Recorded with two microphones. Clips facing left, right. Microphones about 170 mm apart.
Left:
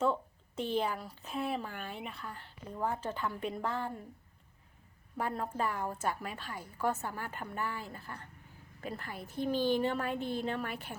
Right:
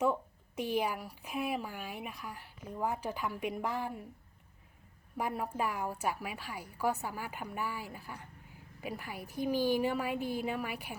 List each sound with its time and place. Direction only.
0.0 s speech: 15° right (ahead or behind)
5.1 s speech: 10° right (ahead or behind)